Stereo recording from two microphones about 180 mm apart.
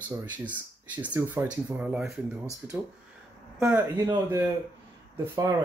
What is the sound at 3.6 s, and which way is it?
Speech, 10° right (ahead or behind).